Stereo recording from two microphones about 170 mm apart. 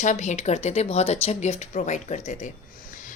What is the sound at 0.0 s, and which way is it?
A woman's voice, 45° left (ahead or behind).